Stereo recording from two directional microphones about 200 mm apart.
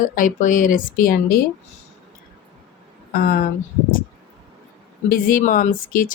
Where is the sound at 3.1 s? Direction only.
45° left (ahead or behind).